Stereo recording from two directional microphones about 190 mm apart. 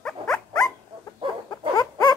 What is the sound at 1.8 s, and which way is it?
Rodents, 20° left (ahead or behind).